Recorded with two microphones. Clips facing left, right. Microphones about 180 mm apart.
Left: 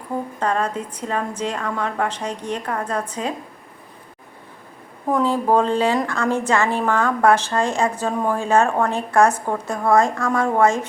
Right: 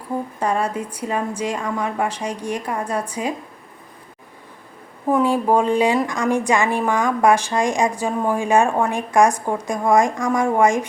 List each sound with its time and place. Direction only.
0.3 s a woman's voice: 10° right (ahead or behind)
5.1 s a woman's voice: 15° right (ahead or behind)